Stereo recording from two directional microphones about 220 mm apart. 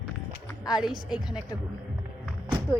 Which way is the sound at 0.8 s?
Centre (ahead or behind).